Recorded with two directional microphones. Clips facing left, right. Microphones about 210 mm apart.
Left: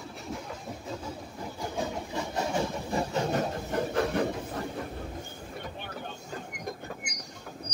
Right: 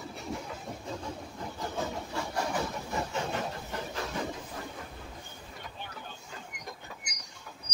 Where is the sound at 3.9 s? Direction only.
60° left (ahead or behind).